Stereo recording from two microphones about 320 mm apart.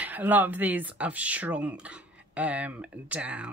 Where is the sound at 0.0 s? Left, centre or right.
Centre.